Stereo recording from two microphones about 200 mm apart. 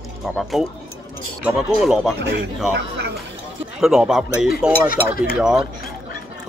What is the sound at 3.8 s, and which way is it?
Speech, centre (ahead or behind).